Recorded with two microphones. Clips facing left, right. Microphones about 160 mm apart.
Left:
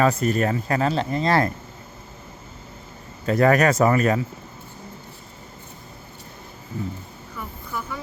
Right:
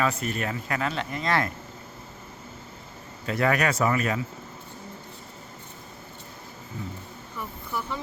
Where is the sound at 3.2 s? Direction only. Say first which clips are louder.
Left 7 dB; 45° left (ahead or behind).